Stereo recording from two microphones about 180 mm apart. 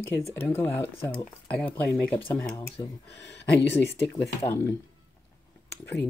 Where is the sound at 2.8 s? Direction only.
20° left (ahead or behind).